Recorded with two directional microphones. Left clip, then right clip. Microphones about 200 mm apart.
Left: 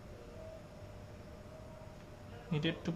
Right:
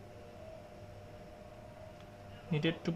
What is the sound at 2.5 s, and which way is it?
Speech, 25° right (ahead or behind).